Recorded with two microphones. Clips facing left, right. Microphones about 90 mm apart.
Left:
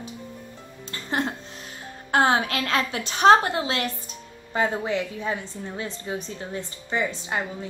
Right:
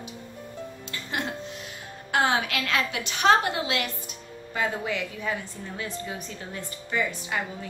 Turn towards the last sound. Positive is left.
turn(degrees=25)  # may be behind; listen again after turning